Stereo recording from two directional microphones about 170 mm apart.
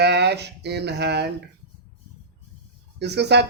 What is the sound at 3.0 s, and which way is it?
Speech, 80° right.